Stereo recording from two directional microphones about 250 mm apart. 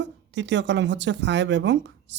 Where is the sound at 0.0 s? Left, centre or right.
Right.